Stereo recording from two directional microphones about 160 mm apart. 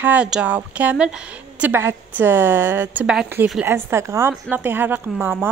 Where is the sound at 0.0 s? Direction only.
10° right (ahead or behind).